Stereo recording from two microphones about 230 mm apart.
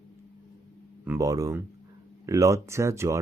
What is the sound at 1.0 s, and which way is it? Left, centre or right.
Speech, centre.